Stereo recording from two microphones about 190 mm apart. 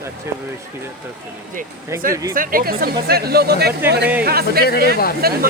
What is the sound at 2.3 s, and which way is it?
Speech, 50° right (ahead or behind).